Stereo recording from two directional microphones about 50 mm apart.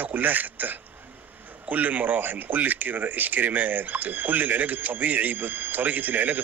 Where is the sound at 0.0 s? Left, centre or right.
Right.